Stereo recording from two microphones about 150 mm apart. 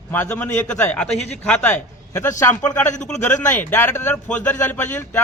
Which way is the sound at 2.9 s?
55° left (ahead or behind).